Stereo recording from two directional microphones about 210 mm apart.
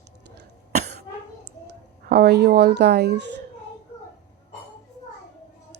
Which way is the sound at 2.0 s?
50° right (ahead or behind).